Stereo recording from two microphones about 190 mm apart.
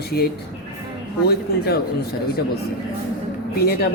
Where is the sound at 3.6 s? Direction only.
55° left (ahead or behind).